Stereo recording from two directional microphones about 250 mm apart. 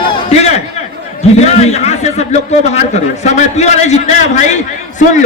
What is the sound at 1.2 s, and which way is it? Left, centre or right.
A man's voice, left.